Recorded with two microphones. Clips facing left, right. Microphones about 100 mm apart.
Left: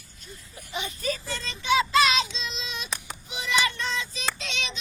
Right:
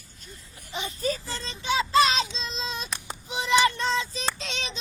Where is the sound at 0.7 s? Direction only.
30° right (ahead or behind).